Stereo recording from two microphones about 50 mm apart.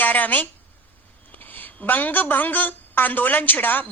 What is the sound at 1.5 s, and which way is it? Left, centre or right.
A woman's voice, left.